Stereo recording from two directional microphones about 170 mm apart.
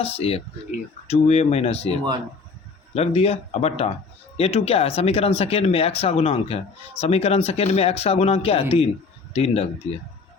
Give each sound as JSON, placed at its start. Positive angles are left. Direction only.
{"t": 0.0, "sound": "speech", "side_deg": 35}